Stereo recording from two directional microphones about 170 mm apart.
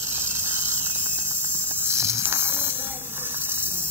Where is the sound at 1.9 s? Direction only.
15° right (ahead or behind).